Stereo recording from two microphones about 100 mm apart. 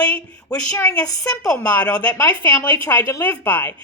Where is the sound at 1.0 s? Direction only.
40° left (ahead or behind).